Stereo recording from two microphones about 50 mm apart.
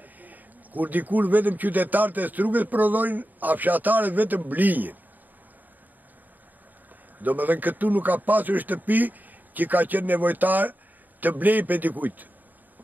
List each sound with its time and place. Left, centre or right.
0.0 s a man's voice: right
7.2 s a man's voice: right